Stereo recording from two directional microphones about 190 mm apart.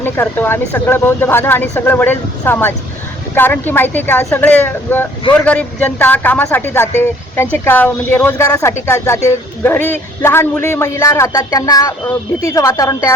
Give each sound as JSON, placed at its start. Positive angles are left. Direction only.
{"t": 0.0, "sound": "speech", "side_deg": 10}